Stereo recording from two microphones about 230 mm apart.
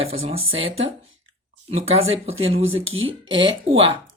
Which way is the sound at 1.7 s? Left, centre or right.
Right.